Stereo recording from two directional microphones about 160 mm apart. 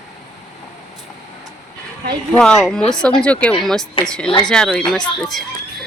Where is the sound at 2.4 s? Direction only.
5° left (ahead or behind).